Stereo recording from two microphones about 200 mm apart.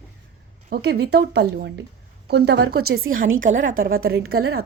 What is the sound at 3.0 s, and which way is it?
Speech, 80° right.